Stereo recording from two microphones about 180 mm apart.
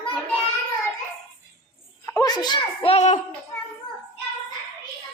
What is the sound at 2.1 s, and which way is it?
A child's voice, 20° left (ahead or behind).